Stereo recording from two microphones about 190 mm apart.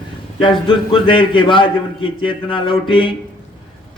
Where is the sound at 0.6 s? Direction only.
25° left (ahead or behind).